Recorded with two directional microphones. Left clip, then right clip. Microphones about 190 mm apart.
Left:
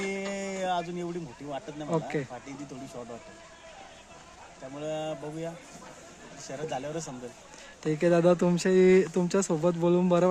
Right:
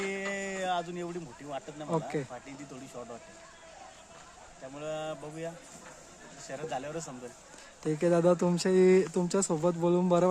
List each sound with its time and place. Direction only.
0.0 s a sound: 15° left (ahead or behind)
1.9 s speech: 15° right (ahead or behind)
4.8 s speech: 15° left (ahead or behind)
7.9 s speech: 15° right (ahead or behind)